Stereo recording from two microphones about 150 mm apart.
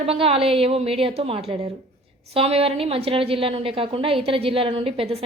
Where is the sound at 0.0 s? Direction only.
40° right (ahead or behind).